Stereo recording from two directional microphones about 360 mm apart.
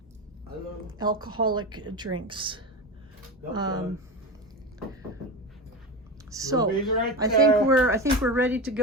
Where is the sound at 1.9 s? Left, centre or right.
Centre.